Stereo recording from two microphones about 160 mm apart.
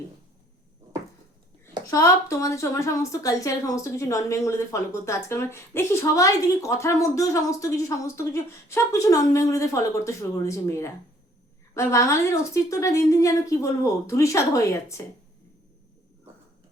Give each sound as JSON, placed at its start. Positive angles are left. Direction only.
{"t": 1.9, "sound": "speech", "side_deg": 20}